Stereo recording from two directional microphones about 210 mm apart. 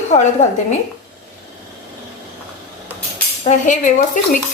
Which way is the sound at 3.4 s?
35° left (ahead or behind).